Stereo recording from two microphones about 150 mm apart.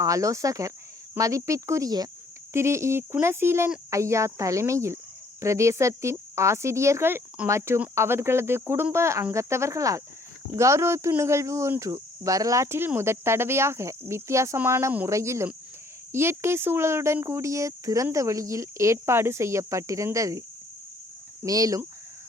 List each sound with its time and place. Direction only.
0.0 s speech: 20° right (ahead or behind)
21.4 s speech: 25° right (ahead or behind)